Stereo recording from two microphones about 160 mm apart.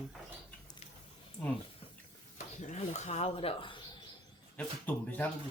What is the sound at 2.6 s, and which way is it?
Speech, 45° left (ahead or behind).